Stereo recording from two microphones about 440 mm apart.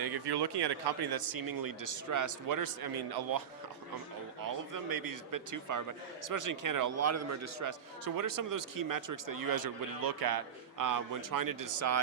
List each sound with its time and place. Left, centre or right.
0.0 s a man's voice: right
4.4 s a man's voice: right